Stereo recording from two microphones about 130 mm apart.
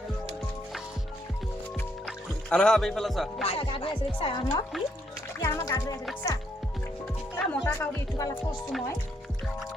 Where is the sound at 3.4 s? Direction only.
45° left (ahead or behind).